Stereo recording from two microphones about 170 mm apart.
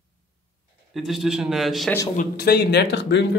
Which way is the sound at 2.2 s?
70° left (ahead or behind).